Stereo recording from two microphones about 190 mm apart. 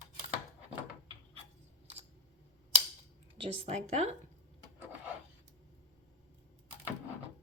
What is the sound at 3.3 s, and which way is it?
Speech, 30° right (ahead or behind).